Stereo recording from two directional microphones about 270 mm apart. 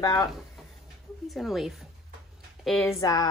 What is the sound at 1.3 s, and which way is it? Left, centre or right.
Speech, centre.